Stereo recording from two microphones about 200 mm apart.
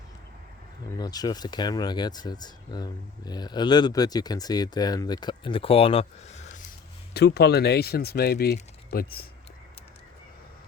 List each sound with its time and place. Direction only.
0.9 s speech: 20° left (ahead or behind); by 6.7 s 35° left (ahead or behind)
7.1 s speech: 55° left (ahead or behind)